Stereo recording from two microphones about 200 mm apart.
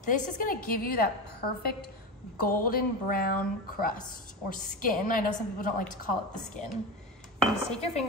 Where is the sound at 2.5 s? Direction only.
45° left (ahead or behind).